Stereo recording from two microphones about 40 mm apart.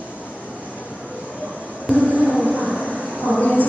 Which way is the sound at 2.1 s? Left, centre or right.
Left.